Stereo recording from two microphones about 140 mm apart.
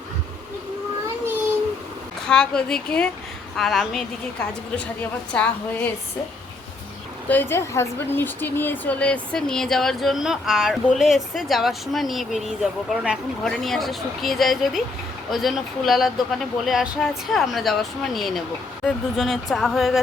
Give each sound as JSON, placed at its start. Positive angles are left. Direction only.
{"t": 2.2, "sound": "speech", "side_deg": 5}
{"t": 4.9, "sound": "a woman's voice", "side_deg": 10}
{"t": 7.3, "sound": "speech", "side_deg": 15}